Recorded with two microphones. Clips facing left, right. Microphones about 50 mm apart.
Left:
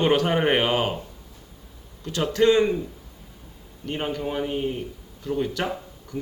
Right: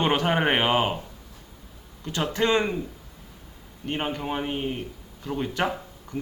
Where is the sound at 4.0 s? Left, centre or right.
Right.